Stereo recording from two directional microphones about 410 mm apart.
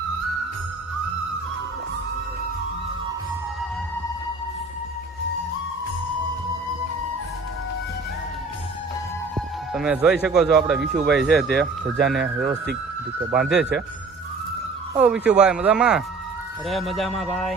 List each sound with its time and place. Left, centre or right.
9.7 s speech: centre
10.8 s speech: right
11.1 s speech: centre
13.3 s speech: centre
14.9 s speech: centre